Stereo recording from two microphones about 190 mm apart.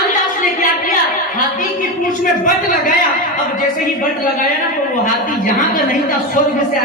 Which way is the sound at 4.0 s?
45° left (ahead or behind).